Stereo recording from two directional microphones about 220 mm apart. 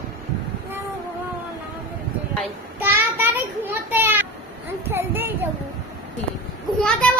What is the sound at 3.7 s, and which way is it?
Children playing, 10° right (ahead or behind).